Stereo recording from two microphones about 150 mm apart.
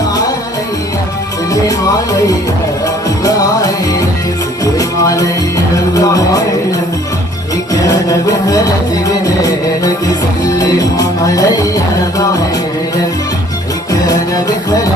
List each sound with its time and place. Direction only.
2.8 s music: 25° left (ahead or behind)
13.9 s music: 25° left (ahead or behind)